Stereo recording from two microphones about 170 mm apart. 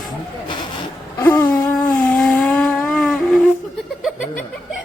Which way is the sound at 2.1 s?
5° left (ahead or behind).